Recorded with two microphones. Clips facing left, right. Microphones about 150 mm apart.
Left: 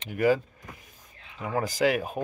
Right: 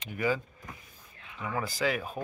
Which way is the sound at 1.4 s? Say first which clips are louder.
Left 6 dB; 45° left (ahead or behind).